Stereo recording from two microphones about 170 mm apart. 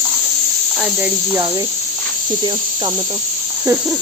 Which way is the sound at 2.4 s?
25° right (ahead or behind).